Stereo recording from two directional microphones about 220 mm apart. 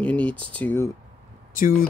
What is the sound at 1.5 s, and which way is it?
Speech, 40° left (ahead or behind).